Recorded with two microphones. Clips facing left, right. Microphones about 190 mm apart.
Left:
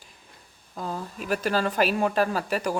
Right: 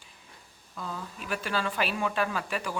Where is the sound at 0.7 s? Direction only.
40° left (ahead or behind).